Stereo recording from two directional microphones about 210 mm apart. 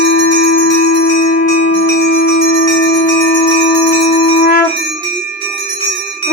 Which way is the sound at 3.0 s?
20° left (ahead or behind).